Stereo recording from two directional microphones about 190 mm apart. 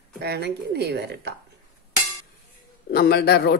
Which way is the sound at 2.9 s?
55° left (ahead or behind).